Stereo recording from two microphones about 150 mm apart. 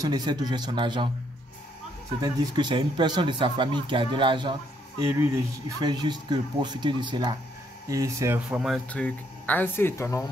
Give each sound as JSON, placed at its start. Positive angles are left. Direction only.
{"t": 0.0, "sound": "speech", "side_deg": -30}
{"t": 2.2, "sound": "speech", "side_deg": -30}
{"t": 8.4, "sound": "speech", "side_deg": -5}